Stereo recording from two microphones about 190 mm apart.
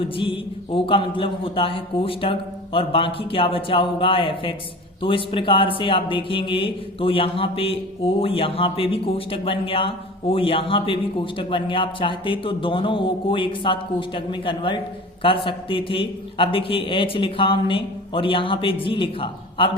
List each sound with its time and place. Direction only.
0.0 s a man's voice: 30° left (ahead or behind)